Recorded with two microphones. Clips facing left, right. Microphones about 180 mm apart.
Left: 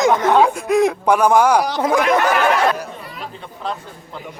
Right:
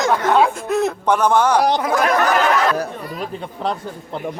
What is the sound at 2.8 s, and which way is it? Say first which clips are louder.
Chatter: right 5 dB; 40° right (ahead or behind).